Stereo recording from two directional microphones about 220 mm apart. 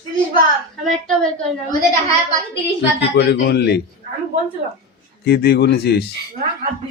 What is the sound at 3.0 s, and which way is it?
Speech, 50° left (ahead or behind).